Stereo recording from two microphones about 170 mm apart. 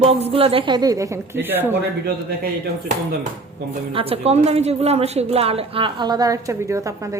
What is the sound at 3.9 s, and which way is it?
A woman's voice, 35° right (ahead or behind).